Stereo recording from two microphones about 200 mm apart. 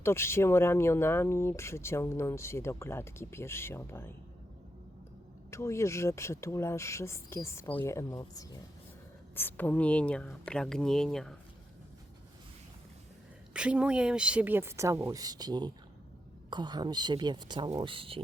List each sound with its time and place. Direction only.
0.0 s speech: 15° left (ahead or behind)
5.5 s speech: 15° left (ahead or behind)
13.5 s a woman's voice: 5° right (ahead or behind); by 18.2 s 25° right (ahead or behind)